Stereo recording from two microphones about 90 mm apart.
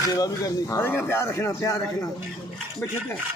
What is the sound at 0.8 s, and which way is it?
Speech, 25° left (ahead or behind).